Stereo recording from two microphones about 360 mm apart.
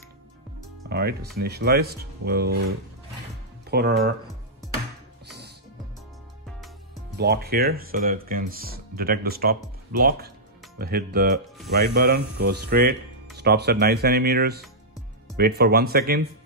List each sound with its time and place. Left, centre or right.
0.8 s speech: right
3.7 s speech: right
7.2 s speech: right